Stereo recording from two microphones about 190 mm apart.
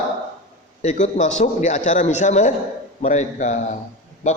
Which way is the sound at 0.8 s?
40° left (ahead or behind).